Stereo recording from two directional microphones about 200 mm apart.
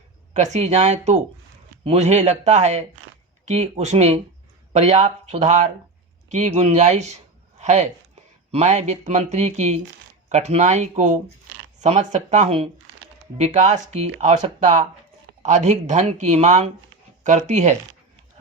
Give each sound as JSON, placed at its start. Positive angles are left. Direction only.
{"t": 0.5, "sound": "speech", "side_deg": -35}